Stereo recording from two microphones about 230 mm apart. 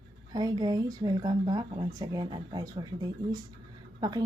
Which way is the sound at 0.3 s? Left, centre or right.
Centre.